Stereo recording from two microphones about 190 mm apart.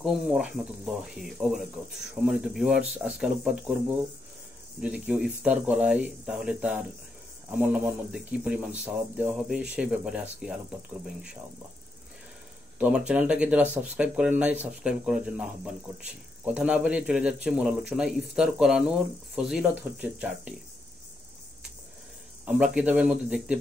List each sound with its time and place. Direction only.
0.0 s speech: centre (ahead or behind)
12.7 s speech: 5° right (ahead or behind)
22.4 s speech: 5° right (ahead or behind)